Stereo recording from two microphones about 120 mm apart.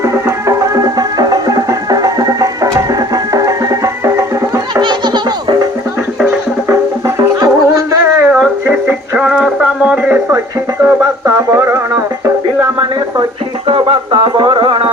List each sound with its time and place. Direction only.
0.0 s music: 25° right (ahead or behind)
7.2 s music: 30° right (ahead or behind)
8.6 s music: 15° right (ahead or behind)
10.8 s music: 25° right (ahead or behind)
13.7 s music: 45° right (ahead or behind)